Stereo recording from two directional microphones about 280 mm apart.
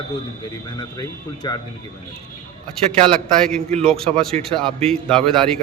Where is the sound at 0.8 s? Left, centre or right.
Centre.